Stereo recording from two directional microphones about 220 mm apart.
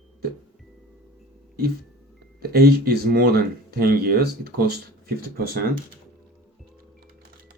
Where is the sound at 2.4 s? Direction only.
45° right (ahead or behind).